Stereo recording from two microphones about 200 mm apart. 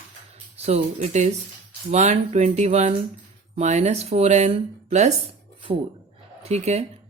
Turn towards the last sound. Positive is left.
turn(degrees=-35)  # may be behind; listen again after turning